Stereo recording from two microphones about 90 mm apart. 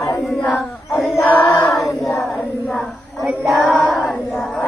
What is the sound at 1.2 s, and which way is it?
Choir, 20° left (ahead or behind).